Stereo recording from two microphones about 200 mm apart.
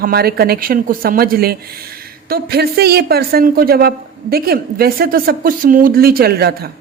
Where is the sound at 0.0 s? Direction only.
50° right (ahead or behind).